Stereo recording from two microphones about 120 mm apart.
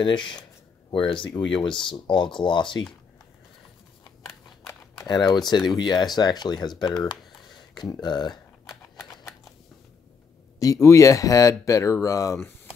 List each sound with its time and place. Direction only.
0.0 s speech: 40° left (ahead or behind)
5.0 s speech: 35° left (ahead or behind)
7.7 s speech: 35° left (ahead or behind)
10.6 s speech: 25° left (ahead or behind)